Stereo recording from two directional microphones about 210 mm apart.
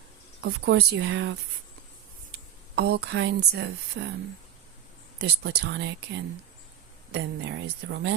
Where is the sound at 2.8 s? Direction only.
50° right (ahead or behind).